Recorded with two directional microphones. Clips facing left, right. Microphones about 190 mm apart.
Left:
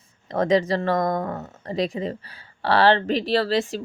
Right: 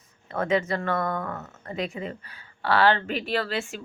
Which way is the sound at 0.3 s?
35° left (ahead or behind).